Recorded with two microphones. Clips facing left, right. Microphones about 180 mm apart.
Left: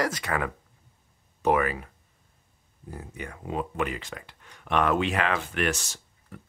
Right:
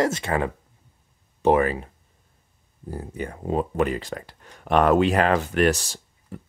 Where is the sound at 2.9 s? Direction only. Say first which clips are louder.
Right 7 dB; 35° right (ahead or behind).